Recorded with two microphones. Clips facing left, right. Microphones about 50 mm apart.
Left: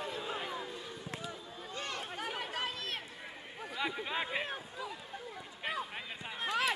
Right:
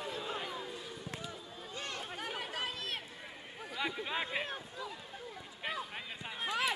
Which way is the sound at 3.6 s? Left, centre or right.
Centre.